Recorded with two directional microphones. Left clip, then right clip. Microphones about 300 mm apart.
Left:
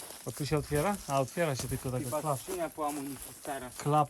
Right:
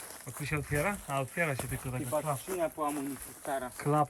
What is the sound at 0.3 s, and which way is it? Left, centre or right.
Speech, centre.